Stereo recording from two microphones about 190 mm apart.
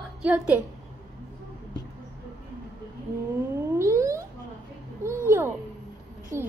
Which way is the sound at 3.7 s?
15° right (ahead or behind).